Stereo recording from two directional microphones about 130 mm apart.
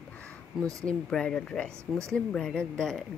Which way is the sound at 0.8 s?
5° left (ahead or behind).